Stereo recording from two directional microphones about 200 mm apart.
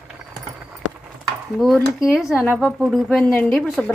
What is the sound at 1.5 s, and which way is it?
Speech, centre (ahead or behind).